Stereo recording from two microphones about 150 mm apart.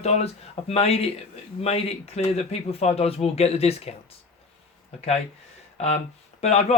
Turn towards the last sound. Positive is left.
turn(degrees=45)  # may be behind; listen again after turning